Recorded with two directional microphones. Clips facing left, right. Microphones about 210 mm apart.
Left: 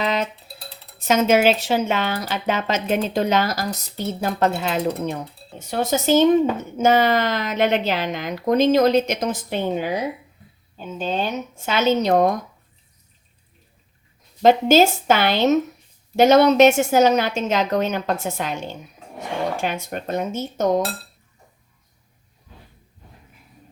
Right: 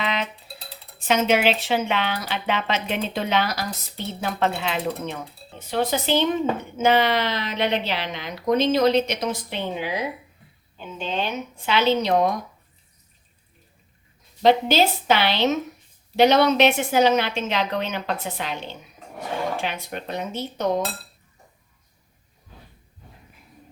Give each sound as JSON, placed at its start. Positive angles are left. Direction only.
{"t": 0.0, "sound": "a sound", "side_deg": 40}
{"t": 0.9, "sound": "speech", "side_deg": 40}
{"t": 14.4, "sound": "speech", "side_deg": 45}